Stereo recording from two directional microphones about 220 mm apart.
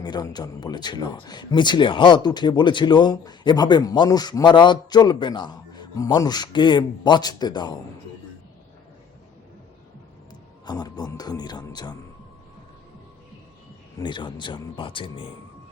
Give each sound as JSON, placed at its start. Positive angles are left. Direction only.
{"t": 0.0, "sound": "speech", "side_deg": 20}
{"t": 10.7, "sound": "speech", "side_deg": 20}
{"t": 14.0, "sound": "speech", "side_deg": 20}